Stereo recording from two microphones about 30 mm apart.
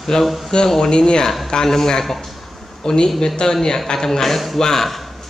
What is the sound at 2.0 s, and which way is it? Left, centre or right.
Speech, centre.